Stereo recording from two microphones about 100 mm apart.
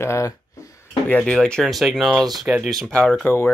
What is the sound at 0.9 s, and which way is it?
Speech, 15° left (ahead or behind).